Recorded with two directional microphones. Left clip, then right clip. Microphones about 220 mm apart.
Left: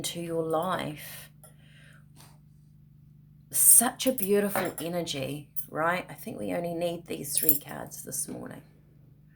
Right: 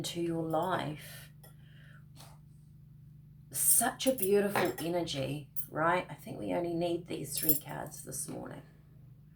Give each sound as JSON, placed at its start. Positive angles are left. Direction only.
{"t": 0.0, "sound": "speech", "side_deg": 50}
{"t": 3.5, "sound": "speech", "side_deg": 50}